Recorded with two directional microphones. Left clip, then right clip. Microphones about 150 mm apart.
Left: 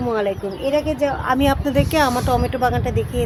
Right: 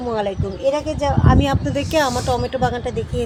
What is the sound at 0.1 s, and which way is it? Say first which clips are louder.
Speech: even; 20° left (ahead or behind).